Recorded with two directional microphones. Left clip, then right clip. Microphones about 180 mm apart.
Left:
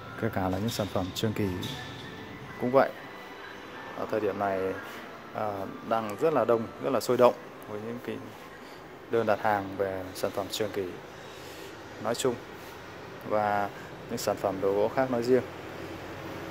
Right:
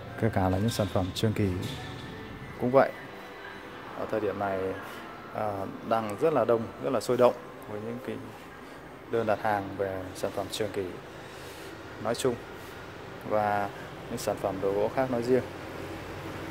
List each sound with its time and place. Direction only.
0.2 s speech: 10° right (ahead or behind)
2.6 s a man's voice: centre (ahead or behind)
4.1 s speech: 15° left (ahead or behind)
5.4 s a man's voice: centre (ahead or behind)
9.1 s speech: 15° left (ahead or behind)
12.0 s a man's voice: 5° left (ahead or behind)